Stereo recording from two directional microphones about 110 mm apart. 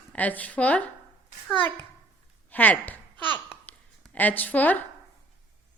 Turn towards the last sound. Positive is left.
turn(degrees=15)  # may be behind; listen again after turning